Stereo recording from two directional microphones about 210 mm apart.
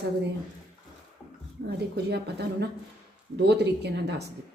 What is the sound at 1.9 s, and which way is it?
A woman's voice, 50° right (ahead or behind).